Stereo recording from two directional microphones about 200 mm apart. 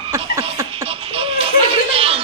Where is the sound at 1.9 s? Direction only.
30° right (ahead or behind).